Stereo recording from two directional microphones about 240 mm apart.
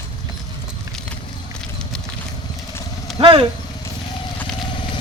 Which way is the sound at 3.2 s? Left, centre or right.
Right.